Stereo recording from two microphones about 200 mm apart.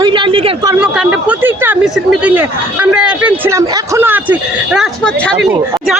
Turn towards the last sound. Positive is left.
turn(degrees=-10)  # may be behind; listen again after turning